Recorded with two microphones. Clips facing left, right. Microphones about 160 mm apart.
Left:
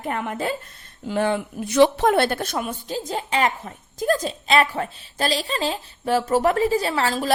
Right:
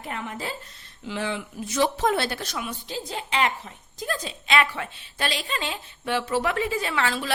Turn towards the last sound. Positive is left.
turn(degrees=40)  # may be behind; listen again after turning